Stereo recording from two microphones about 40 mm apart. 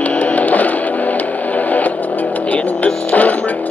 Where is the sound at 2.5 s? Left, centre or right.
Left.